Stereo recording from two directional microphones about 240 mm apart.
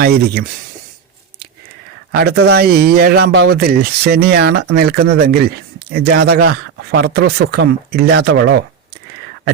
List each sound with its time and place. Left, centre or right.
2.1 s speech: right